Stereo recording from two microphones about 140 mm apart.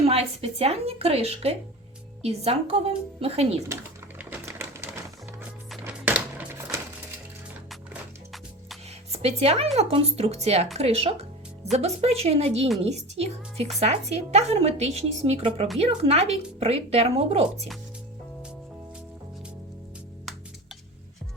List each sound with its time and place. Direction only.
0.0 s speech: 45° right (ahead or behind)
4.2 s typewriter: 15° right (ahead or behind)
5.8 s a sound: 10° right (ahead or behind)
9.1 s speech: 45° right (ahead or behind)